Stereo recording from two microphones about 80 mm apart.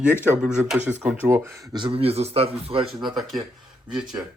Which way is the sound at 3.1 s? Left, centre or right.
Centre.